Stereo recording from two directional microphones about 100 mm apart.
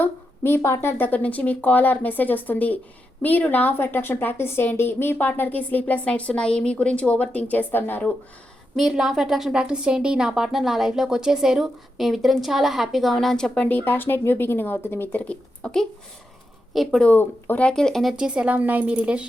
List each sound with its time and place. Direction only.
0.0 s a woman's voice: 20° left (ahead or behind)
8.7 s a woman's voice: centre (ahead or behind)
17.0 s a woman's voice: 15° left (ahead or behind)
18.2 s a woman's voice: 10° right (ahead or behind)